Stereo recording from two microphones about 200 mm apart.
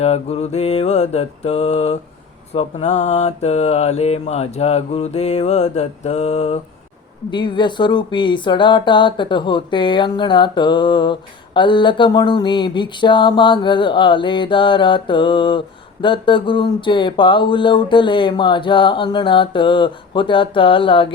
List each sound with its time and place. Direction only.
0.0 s mantra: 30° left (ahead or behind)
7.3 s speech: 25° left (ahead or behind)